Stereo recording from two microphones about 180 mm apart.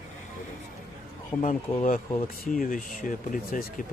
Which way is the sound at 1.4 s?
45° left (ahead or behind).